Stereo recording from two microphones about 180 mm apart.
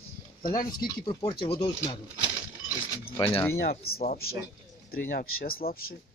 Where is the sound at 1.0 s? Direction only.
25° left (ahead or behind).